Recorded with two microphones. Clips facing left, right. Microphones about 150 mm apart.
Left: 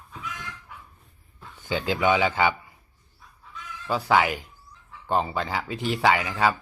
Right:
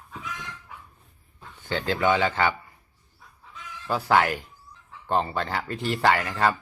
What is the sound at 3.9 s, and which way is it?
Speech, centre (ahead or behind).